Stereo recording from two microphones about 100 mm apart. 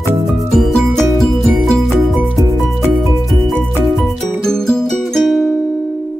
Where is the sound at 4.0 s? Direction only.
5° left (ahead or behind).